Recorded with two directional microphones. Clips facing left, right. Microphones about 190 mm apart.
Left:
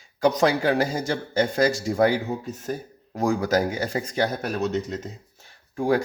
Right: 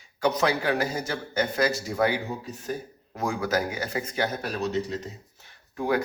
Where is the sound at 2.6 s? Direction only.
45° left (ahead or behind).